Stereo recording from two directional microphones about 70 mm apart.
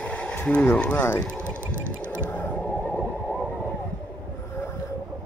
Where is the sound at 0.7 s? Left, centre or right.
Left.